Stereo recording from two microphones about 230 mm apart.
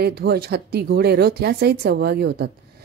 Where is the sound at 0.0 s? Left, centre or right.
Right.